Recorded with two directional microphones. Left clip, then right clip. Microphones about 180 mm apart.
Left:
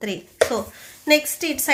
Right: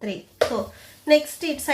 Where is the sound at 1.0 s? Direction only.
20° left (ahead or behind).